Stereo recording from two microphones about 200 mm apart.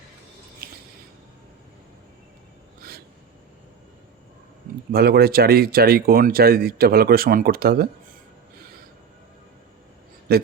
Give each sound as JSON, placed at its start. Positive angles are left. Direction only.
{"t": 0.6, "sound": "squish", "side_deg": -50}
{"t": 4.9, "sound": "speech", "side_deg": -50}
{"t": 10.3, "sound": "speech", "side_deg": -50}